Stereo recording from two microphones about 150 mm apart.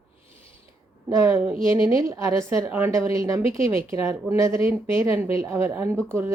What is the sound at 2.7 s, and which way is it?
A woman's voice, 15° right (ahead or behind).